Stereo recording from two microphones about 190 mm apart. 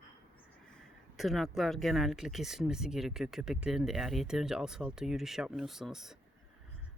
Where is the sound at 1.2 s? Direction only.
Centre (ahead or behind).